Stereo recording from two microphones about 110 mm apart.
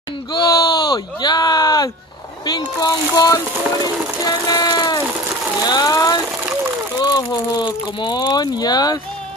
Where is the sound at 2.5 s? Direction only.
35° left (ahead or behind).